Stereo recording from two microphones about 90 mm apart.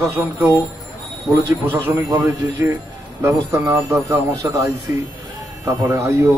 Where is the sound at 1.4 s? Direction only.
30° right (ahead or behind).